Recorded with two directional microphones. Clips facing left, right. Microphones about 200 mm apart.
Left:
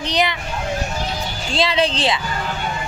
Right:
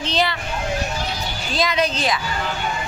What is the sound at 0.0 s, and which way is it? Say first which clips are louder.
Vehicle: left 1 dB; 15° left (ahead or behind).